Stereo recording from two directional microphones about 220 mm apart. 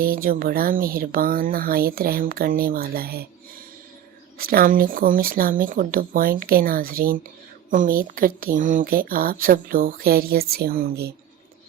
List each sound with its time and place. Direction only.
0.0 s speech: 40° right (ahead or behind)
4.4 s speech: 45° right (ahead or behind)